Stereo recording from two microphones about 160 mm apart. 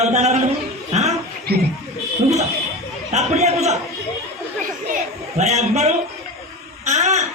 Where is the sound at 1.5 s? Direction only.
80° right.